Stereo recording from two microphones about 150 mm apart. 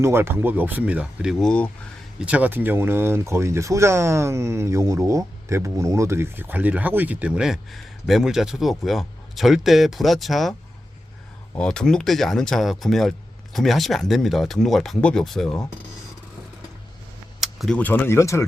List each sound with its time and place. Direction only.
0.0 s speech: 15° right (ahead or behind); by 1.7 s 5° left (ahead or behind)
2.2 s speech: 10° right (ahead or behind)
11.5 s speech: 5° left (ahead or behind)
17.4 s speech: centre (ahead or behind); by 18.4 s 20° left (ahead or behind)